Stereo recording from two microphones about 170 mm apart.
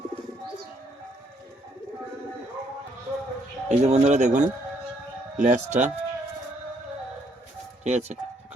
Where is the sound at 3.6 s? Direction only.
40° right (ahead or behind).